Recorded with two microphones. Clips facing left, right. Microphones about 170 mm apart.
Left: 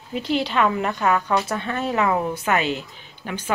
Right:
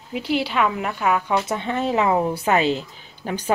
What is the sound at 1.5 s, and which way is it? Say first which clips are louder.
Speech: right 2 dB; 25° right (ahead or behind).